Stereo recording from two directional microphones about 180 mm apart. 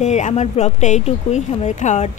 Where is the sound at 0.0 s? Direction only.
40° left (ahead or behind).